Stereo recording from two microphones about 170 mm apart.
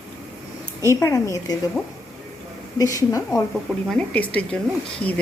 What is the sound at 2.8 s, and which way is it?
Speech, 20° left (ahead or behind).